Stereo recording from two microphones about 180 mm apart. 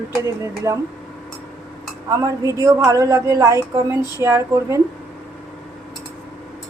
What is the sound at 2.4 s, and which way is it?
A woman's voice, 15° right (ahead or behind).